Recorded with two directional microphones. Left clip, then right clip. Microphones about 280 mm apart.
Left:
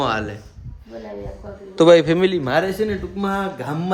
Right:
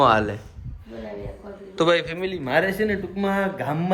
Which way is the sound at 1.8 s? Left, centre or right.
Centre.